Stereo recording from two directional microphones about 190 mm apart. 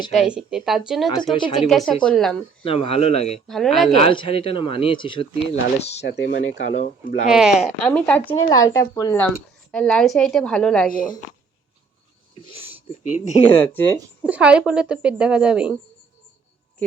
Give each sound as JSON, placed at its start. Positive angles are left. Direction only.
{"t": 0.2, "sound": "speech", "side_deg": -5}
{"t": 1.2, "sound": "speech", "side_deg": 25}
{"t": 1.6, "sound": "speech", "side_deg": 0}
{"t": 2.6, "sound": "speech", "side_deg": 30}
{"t": 3.4, "sound": "speech", "side_deg": 0}
{"t": 4.0, "sound": "speech", "side_deg": 25}
{"t": 6.0, "sound": "speech", "side_deg": 60}
{"t": 6.6, "sound": "speech", "side_deg": 40}
{"t": 7.3, "sound": "speech", "side_deg": -5}
{"t": 7.9, "sound": "speech", "side_deg": 5}
{"t": 9.2, "sound": "speech", "side_deg": 5}
{"t": 13.1, "sound": "speech", "side_deg": 40}
{"t": 13.6, "sound": "speech", "side_deg": 10}
{"t": 14.3, "sound": "speech", "side_deg": -5}